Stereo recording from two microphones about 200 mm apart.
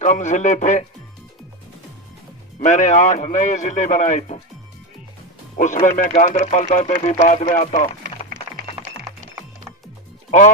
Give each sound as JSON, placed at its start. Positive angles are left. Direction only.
{"t": 0.0, "sound": "speech", "side_deg": 35}
{"t": 2.6, "sound": "speech", "side_deg": 40}
{"t": 5.5, "sound": "speech", "side_deg": 40}